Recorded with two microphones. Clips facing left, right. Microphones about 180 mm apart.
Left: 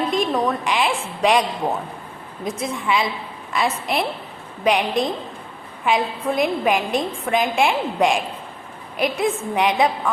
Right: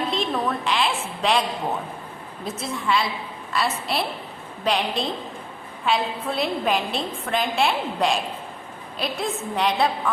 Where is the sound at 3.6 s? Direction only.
15° left (ahead or behind).